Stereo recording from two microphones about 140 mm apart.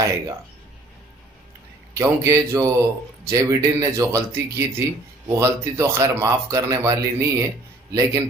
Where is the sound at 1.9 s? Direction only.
20° right (ahead or behind).